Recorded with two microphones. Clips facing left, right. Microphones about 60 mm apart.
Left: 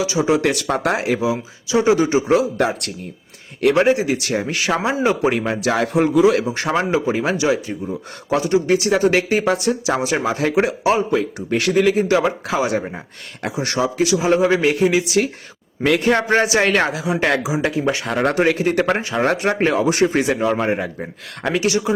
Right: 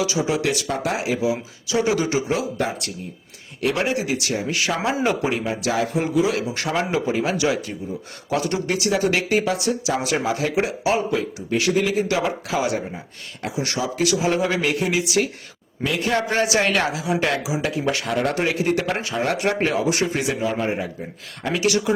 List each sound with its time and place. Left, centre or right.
0.0 s speech: left
0.4 s speech: left
1.2 s speech: left
3.6 s speech: left
5.7 s a man's voice: left
6.4 s speech: left
14.0 s speech: left
18.1 s speech: left
20.4 s a man's voice: left
21.5 s speech: left